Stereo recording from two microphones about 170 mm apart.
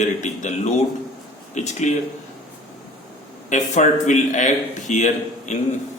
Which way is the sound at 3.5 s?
45° left (ahead or behind).